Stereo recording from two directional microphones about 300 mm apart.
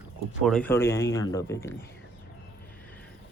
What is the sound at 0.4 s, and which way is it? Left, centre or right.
Speech, centre.